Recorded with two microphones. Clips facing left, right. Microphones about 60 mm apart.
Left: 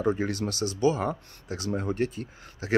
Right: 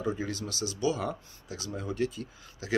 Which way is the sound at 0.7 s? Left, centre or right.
Left.